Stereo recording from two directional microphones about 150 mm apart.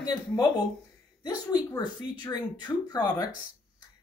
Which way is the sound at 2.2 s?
25° left (ahead or behind).